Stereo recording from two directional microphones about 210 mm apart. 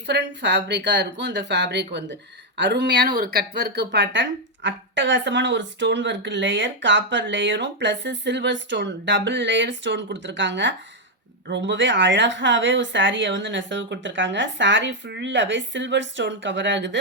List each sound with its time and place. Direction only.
0.1 s speech: 55° right (ahead or behind)